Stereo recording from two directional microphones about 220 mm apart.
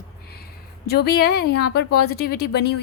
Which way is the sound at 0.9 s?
45° left (ahead or behind).